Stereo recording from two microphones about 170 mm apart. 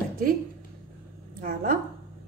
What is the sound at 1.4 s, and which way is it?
Speech, 55° right (ahead or behind).